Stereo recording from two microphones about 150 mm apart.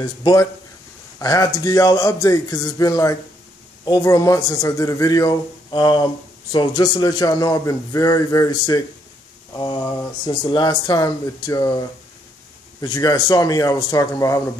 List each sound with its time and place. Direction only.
0.0 s speech: 30° left (ahead or behind)
12.8 s speech: 25° left (ahead or behind)